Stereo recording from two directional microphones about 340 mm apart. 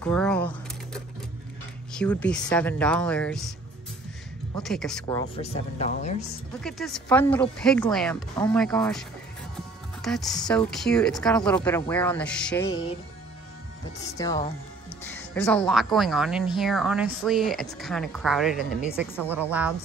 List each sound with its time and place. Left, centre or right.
0.0 s speech: centre
2.0 s speech: centre
4.6 s speech: centre; by 6.2 s left
6.6 s speech: centre
10.0 s speech: centre
14.1 s speech: centre